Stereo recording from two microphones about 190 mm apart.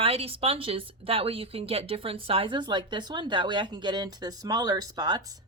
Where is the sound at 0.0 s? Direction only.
30° right (ahead or behind).